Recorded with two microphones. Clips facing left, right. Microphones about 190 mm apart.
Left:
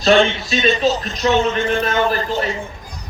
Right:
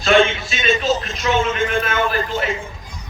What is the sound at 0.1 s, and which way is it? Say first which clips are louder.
Speech: right 4 dB; 35° left (ahead or behind).